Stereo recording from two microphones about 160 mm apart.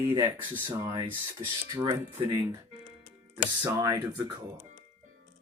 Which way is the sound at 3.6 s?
20° right (ahead or behind).